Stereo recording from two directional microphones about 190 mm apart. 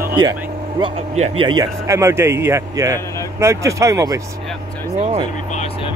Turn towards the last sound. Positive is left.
turn(degrees=-15)  # may be behind; listen again after turning